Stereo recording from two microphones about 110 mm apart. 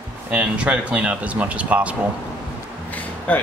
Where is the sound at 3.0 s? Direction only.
15° left (ahead or behind).